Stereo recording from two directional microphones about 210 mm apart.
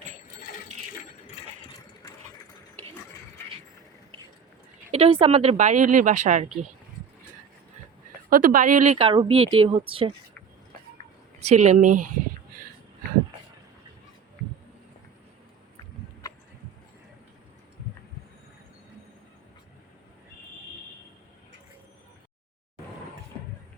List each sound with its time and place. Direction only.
4.9 s speech: 30° right (ahead or behind)
8.3 s speech: 40° right (ahead or behind)
9.0 s speech: 25° right (ahead or behind)
11.3 s speech: 35° right (ahead or behind)